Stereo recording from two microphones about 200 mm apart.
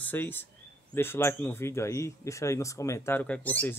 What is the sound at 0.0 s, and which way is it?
Speech, 10° left (ahead or behind).